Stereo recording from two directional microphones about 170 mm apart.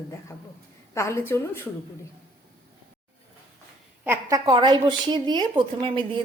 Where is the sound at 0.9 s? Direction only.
15° left (ahead or behind).